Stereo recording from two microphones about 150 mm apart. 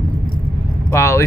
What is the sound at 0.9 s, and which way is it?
Speech, 20° left (ahead or behind).